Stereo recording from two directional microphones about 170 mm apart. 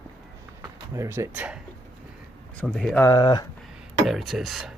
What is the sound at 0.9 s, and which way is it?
Speech, 15° right (ahead or behind).